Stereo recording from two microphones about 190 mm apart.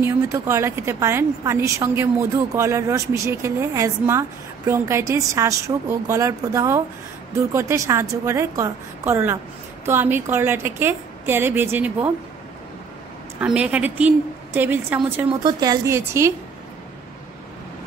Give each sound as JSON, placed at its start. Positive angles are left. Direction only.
{"t": 0.0, "sound": "a woman's voice", "side_deg": -15}
{"t": 13.4, "sound": "a woman's voice", "side_deg": -5}